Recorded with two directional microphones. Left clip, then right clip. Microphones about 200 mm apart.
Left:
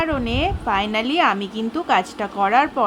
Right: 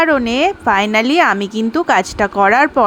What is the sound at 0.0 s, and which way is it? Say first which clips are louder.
A woman's voice: right 8 dB; 35° right (ahead or behind).